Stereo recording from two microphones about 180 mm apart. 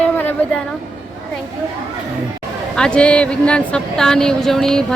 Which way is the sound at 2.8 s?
5° left (ahead or behind).